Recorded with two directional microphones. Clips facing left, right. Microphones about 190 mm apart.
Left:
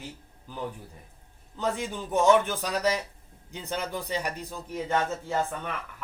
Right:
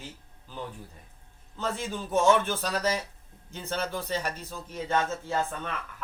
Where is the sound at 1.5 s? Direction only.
15° left (ahead or behind).